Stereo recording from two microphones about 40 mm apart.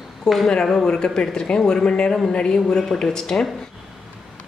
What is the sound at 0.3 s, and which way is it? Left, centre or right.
A woman's voice, centre.